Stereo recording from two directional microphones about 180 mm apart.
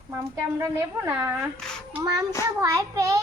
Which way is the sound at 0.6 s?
10° right (ahead or behind).